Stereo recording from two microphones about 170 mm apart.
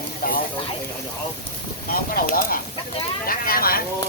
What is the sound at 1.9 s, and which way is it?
Speech, 60° left (ahead or behind).